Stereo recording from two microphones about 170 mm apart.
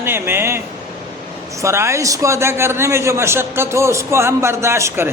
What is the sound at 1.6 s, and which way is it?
A man's voice, 15° right (ahead or behind).